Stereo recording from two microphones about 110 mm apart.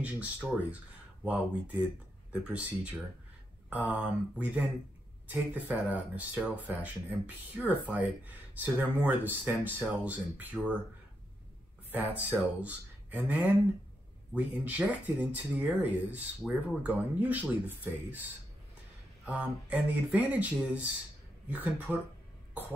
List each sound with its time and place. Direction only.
0.0 s speech: 10° right (ahead or behind)
11.9 s speech: 15° right (ahead or behind)
19.2 s speech: 10° right (ahead or behind)